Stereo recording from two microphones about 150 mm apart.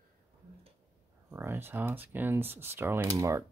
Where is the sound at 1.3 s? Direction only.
15° right (ahead or behind).